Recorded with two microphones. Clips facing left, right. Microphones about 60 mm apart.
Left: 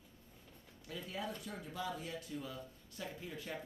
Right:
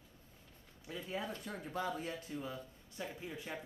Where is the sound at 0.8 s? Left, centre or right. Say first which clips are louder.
Right 3 dB; centre.